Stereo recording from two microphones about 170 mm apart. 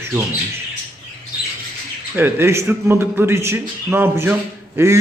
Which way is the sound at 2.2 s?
15° right (ahead or behind).